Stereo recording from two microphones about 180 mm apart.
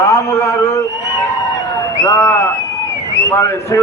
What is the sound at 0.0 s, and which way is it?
Speech, 20° left (ahead or behind).